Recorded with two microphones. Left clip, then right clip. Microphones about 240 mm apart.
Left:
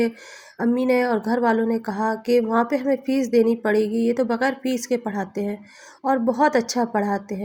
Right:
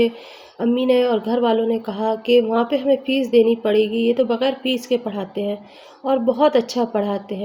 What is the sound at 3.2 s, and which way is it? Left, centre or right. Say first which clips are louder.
Speech: right 3 dB; centre.